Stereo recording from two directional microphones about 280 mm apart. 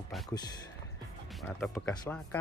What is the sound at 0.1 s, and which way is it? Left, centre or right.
Speech, centre.